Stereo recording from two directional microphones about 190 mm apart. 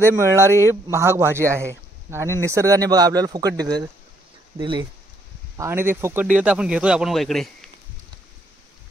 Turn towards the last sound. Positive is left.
turn(degrees=0)  # may be behind; listen again after turning